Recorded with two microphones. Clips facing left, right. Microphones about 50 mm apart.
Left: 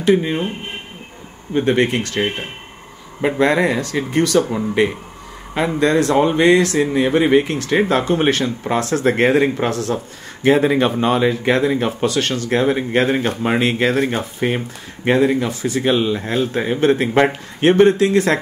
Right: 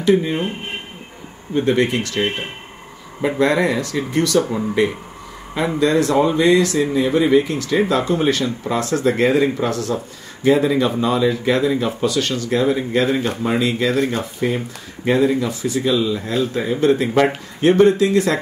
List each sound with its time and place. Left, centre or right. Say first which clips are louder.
0.0 s speech: left 1 dB; left
1.5 s speech: left 1 dB; left